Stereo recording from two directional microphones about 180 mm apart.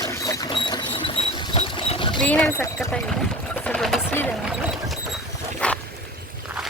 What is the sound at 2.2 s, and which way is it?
Speech, 5° left (ahead or behind).